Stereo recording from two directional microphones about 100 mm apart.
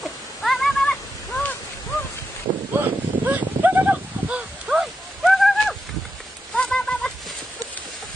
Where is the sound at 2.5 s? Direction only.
90° right.